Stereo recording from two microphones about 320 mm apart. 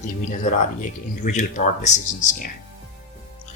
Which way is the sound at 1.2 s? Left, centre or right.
Left.